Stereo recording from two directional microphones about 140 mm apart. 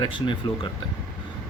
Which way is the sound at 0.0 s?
35° left (ahead or behind).